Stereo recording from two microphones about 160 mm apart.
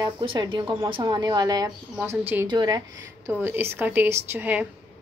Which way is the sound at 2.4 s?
25° right (ahead or behind).